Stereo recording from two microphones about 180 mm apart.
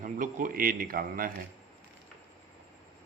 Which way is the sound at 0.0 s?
50° right (ahead or behind).